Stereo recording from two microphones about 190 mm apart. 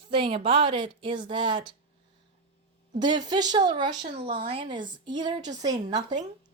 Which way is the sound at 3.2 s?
20° right (ahead or behind).